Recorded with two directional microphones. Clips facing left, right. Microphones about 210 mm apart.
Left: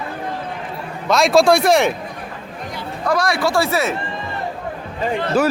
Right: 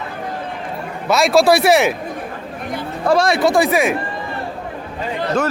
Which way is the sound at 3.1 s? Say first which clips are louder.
Right 4 dB; 25° right (ahead or behind).